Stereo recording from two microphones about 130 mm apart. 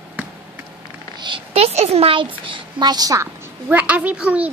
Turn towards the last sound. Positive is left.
turn(degrees=-10)  # may be behind; listen again after turning